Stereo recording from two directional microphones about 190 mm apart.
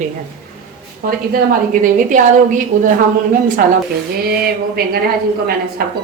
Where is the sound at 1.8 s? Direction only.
45° right (ahead or behind).